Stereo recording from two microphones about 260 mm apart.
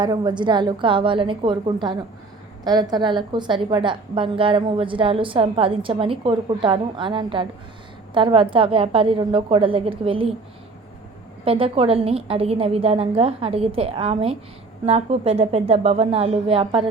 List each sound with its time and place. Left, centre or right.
0.0 s a woman's voice: centre
11.4 s a woman's voice: right